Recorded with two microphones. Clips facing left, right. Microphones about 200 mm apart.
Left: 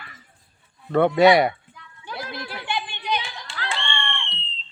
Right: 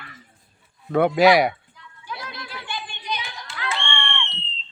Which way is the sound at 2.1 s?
55° left (ahead or behind).